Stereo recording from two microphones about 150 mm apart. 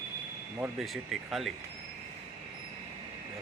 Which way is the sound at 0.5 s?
5° right (ahead or behind).